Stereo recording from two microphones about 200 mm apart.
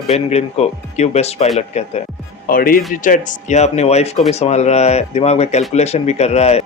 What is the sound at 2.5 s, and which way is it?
Speech, 45° left (ahead or behind).